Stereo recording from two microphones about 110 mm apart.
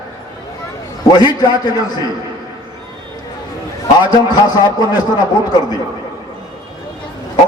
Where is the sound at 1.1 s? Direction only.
35° left (ahead or behind).